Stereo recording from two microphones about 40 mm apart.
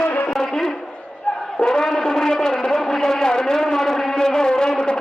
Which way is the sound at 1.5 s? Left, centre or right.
Centre.